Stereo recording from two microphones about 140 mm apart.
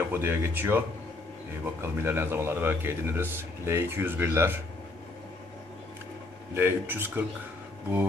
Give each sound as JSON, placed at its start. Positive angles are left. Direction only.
{"t": 0.1, "sound": "speech", "side_deg": -15}
{"t": 6.5, "sound": "speech", "side_deg": -15}